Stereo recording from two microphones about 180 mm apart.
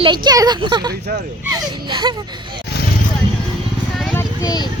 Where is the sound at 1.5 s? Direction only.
20° right (ahead or behind).